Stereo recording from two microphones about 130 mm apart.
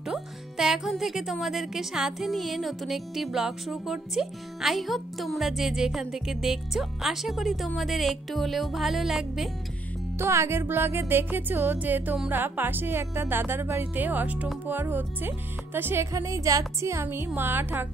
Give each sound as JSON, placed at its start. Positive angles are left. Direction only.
{"t": 0.0, "sound": "speech", "side_deg": -5}
{"t": 10.1, "sound": "speech", "side_deg": -20}